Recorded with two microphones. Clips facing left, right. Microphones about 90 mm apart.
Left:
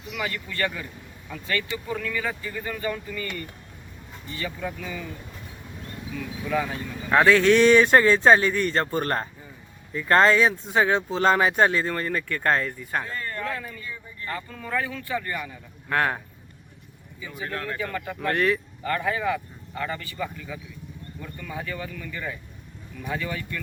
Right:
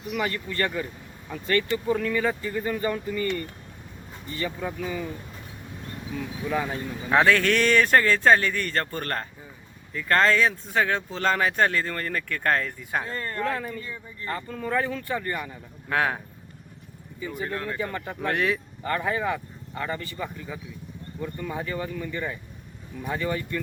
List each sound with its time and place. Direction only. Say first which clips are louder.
0.1 s speech: right 3 dB; 35° right (ahead or behind)
6.1 s speech: right 2 dB; 35° right (ahead or behind)
6.5 s speech: left 2 dB; 25° right (ahead or behind)
7.1 s speech: left 3 dB; 5° left (ahead or behind)
11.1 s speech: left 4 dB; 30° left (ahead or behind)
11.6 s speech: left 2 dB; 15° left (ahead or behind)
12.8 s speech: even; 5° right (ahead or behind)
13.1 s speech: right 2 dB; 35° right (ahead or behind)
15.9 s speech: left 1 dB; centre (ahead or behind)
17.5 s speech: left 3 dB; 15° right (ahead or behind)
18.2 s speech: left 2 dB; 5° right (ahead or behind)
18.8 s speech: even; 20° right (ahead or behind)